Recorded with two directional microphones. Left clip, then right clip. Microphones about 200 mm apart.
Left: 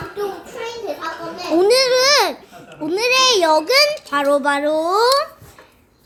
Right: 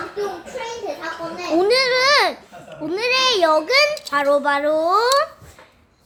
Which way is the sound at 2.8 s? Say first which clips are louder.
Left 3 dB; 15° left (ahead or behind).